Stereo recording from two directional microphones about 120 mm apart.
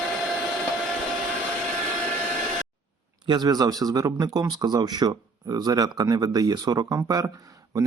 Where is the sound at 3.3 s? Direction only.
35° right (ahead or behind).